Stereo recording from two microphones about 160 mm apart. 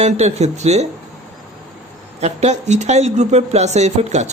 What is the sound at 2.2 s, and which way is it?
Speech, 45° right (ahead or behind).